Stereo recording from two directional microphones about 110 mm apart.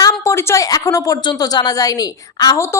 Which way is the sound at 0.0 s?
30° left (ahead or behind).